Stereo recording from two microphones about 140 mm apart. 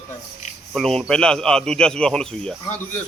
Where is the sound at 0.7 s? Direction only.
5° left (ahead or behind).